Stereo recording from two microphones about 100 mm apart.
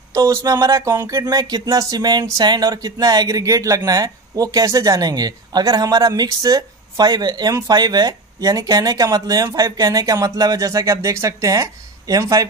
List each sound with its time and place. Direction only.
0.1 s speech: 30° right (ahead or behind)